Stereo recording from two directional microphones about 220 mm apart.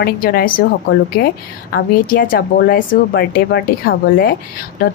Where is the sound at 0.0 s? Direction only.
45° left (ahead or behind).